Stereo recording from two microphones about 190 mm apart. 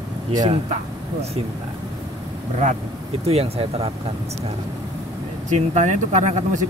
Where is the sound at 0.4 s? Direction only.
35° right (ahead or behind).